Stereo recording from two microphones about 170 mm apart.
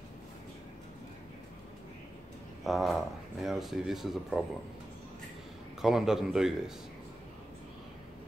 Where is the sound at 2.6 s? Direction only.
Centre (ahead or behind).